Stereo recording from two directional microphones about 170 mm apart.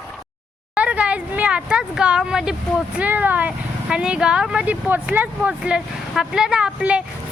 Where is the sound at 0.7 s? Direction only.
5° right (ahead or behind).